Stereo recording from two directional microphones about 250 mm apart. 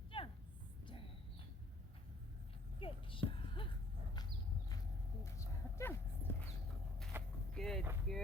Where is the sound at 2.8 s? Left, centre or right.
Left.